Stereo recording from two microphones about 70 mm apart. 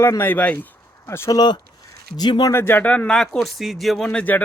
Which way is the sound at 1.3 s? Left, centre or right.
Left.